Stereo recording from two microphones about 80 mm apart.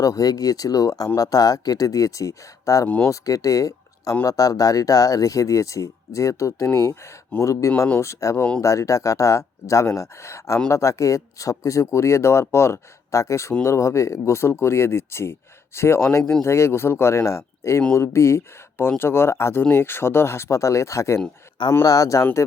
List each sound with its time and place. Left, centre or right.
0.0 s speech: left
2.8 s speech: left
3.1 s speech: left